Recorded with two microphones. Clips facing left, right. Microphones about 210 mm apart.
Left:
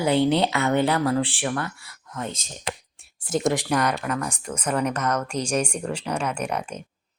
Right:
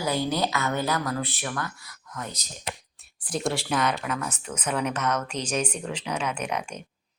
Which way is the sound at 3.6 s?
10° left (ahead or behind).